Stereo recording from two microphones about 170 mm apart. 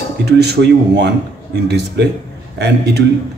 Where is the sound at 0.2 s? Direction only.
75° right (ahead or behind).